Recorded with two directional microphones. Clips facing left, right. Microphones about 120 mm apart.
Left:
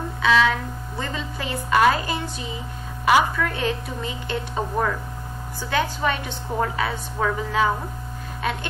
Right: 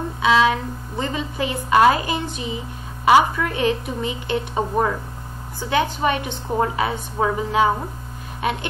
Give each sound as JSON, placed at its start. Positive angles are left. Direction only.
{"t": 0.2, "sound": "a woman's voice", "side_deg": -20}